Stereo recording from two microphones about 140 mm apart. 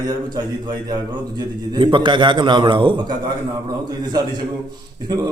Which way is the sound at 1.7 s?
35° right (ahead or behind).